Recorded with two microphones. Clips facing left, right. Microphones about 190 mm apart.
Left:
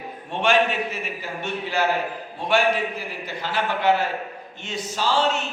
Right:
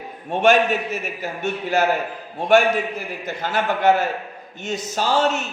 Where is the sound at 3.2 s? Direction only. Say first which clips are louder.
Right 4 dB; 45° right (ahead or behind).